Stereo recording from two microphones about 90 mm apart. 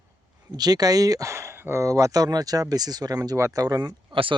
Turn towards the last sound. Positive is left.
turn(degrees=-70)  # may be behind; listen again after turning